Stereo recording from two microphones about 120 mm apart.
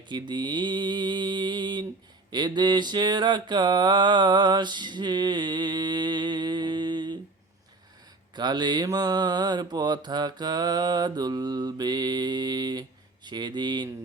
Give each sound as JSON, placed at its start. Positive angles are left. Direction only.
{"t": 0.1, "sound": "mantra", "side_deg": -40}
{"t": 8.4, "sound": "mantra", "side_deg": -35}